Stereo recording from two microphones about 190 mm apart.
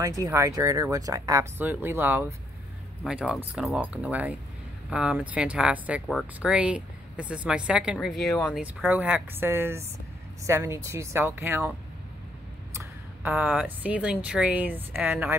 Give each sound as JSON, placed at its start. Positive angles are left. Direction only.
{"t": 0.0, "sound": "speech", "side_deg": -15}
{"t": 8.5, "sound": "speech", "side_deg": -5}
{"t": 12.7, "sound": "speech", "side_deg": -10}